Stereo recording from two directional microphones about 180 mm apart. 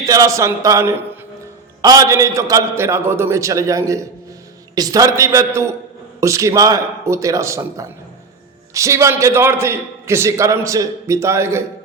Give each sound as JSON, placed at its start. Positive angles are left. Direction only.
{"t": 0.0, "sound": "a man's voice", "side_deg": -20}